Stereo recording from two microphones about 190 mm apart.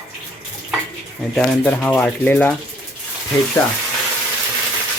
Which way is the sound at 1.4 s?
5° left (ahead or behind).